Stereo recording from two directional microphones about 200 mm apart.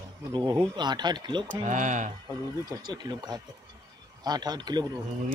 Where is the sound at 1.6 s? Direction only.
40° right (ahead or behind).